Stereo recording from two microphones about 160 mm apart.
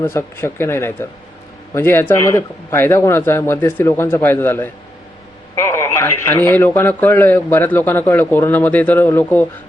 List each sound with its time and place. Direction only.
0.0 s speech: 15° left (ahead or behind)